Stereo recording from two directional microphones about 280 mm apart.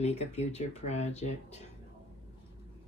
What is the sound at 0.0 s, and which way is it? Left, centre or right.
Speech, left.